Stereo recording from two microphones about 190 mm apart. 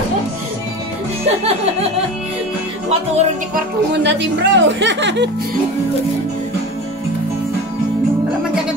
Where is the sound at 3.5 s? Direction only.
65° right (ahead or behind).